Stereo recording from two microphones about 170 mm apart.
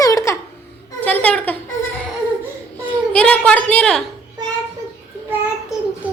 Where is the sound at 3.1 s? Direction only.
5° left (ahead or behind).